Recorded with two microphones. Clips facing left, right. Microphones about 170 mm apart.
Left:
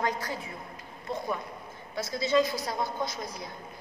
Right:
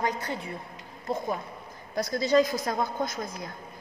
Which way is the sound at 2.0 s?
40° right (ahead or behind).